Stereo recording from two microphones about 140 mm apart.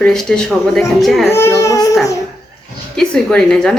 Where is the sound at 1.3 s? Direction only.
20° left (ahead or behind).